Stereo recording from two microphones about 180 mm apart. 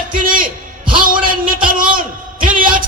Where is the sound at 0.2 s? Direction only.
50° right (ahead or behind).